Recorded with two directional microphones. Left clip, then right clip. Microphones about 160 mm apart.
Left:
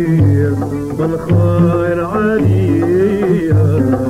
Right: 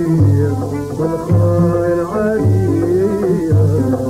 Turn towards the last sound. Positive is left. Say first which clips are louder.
# left 2 dB
turn(degrees=-25)  # may be behind; listen again after turning